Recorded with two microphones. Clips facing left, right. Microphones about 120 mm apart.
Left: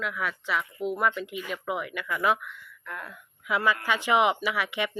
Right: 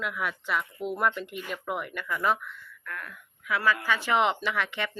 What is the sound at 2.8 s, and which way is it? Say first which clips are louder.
Speech: left 1 dB; 20° left (ahead or behind).